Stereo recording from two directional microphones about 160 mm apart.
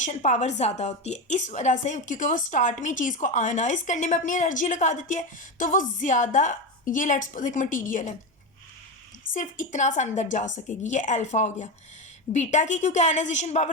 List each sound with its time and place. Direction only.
0.0 s a woman's voice: 45° left (ahead or behind)
9.3 s a woman's voice: 55° left (ahead or behind)